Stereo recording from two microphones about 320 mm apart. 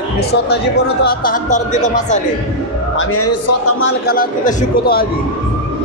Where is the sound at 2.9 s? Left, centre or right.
Left.